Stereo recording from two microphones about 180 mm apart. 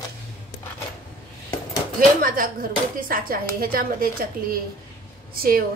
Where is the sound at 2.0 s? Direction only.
50° right (ahead or behind).